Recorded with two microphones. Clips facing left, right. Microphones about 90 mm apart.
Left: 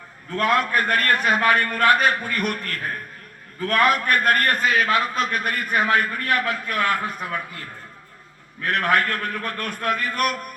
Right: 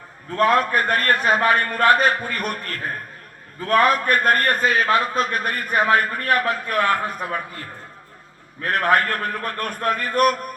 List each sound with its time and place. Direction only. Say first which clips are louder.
0.3 s a man's voice: right 3 dB; 35° right (ahead or behind)
8.6 s a man's voice: right 2 dB; 35° right (ahead or behind)